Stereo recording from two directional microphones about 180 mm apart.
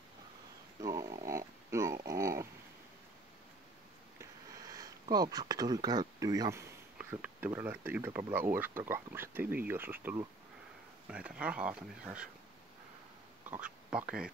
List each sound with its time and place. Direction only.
0.7 s dog: 20° right (ahead or behind)
4.2 s sniff: 20° right (ahead or behind)
5.1 s speech: 20° right (ahead or behind); by 12.3 s 5° right (ahead or behind)
13.5 s speech: 5° right (ahead or behind)